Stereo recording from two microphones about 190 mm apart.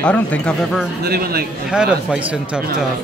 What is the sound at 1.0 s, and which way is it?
Speech, 55° right (ahead or behind).